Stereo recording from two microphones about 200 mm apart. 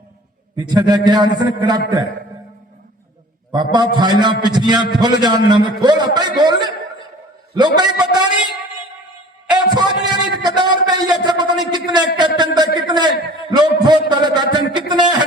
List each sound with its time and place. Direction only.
0.7 s a man's voice: 20° right (ahead or behind)
3.5 s a man's voice: 20° right (ahead or behind)
7.8 s a man's voice: 20° right (ahead or behind)
9.5 s a man's voice: 20° right (ahead or behind)